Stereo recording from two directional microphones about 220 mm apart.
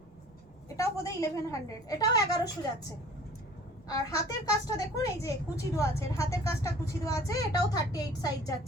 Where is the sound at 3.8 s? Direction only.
15° left (ahead or behind).